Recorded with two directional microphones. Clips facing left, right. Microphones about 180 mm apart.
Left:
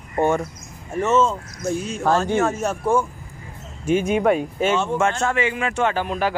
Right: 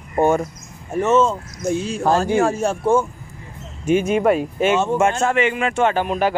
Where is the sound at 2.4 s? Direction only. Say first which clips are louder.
Right 3 dB; 30° right (ahead or behind).